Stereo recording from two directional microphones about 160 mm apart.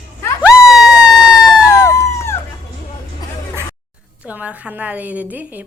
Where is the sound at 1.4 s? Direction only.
20° left (ahead or behind).